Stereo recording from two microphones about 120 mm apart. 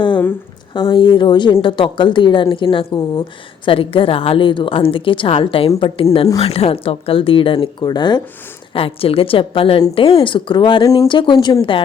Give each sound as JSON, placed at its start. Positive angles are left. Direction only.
{"t": 0.7, "sound": "a woman's voice", "side_deg": 45}
{"t": 8.7, "sound": "a woman's voice", "side_deg": 50}
{"t": 10.8, "sound": "speech", "side_deg": 25}
{"t": 11.1, "sound": "a woman's voice", "side_deg": 40}